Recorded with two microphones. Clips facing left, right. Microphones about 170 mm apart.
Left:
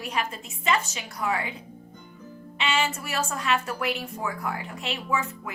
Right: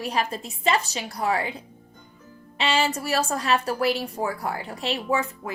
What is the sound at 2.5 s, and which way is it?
A woman's voice, 35° right (ahead or behind).